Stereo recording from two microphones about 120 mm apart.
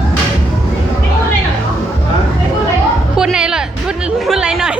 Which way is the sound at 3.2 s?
5° right (ahead or behind).